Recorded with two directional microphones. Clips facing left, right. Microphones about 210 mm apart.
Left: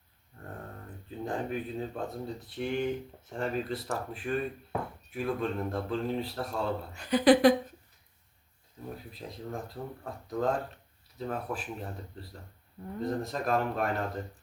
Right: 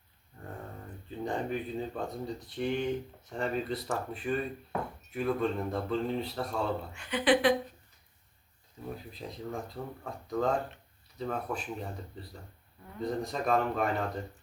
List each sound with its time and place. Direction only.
1.2 s speech: centre (ahead or behind)
6.9 s a woman's voice: 40° left (ahead or behind)
8.8 s speech: centre (ahead or behind)